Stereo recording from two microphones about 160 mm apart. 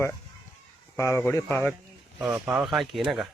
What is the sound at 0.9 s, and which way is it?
Speech, 15° left (ahead or behind).